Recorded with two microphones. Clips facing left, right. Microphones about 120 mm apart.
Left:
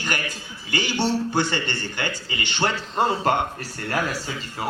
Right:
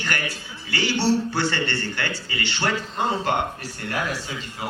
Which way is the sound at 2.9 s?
40° left (ahead or behind).